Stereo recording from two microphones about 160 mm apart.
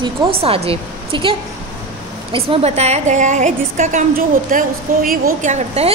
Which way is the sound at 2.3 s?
40° right (ahead or behind).